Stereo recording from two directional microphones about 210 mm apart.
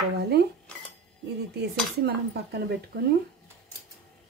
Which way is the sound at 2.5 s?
50° right (ahead or behind).